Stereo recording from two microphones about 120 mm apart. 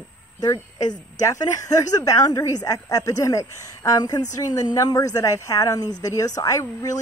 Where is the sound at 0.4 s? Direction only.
35° left (ahead or behind).